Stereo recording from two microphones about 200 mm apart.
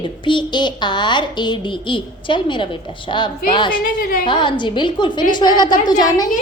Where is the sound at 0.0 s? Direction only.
25° left (ahead or behind).